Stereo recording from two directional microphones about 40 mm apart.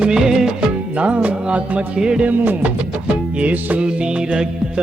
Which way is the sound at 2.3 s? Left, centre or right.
Right.